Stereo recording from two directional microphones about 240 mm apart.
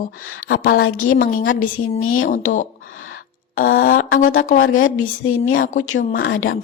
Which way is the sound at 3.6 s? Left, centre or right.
Left.